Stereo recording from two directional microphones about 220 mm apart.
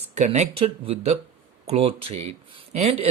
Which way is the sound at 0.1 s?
30° right (ahead or behind).